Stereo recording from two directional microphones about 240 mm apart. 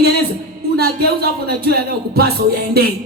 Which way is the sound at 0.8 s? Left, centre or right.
Right.